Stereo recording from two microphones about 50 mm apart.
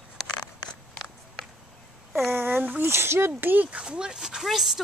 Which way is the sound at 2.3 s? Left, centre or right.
Right.